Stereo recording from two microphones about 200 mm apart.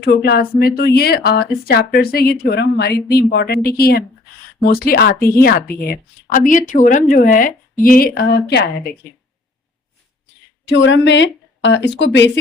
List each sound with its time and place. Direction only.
0.0 s a woman's voice: 50° left (ahead or behind)
10.7 s speech: 65° left (ahead or behind)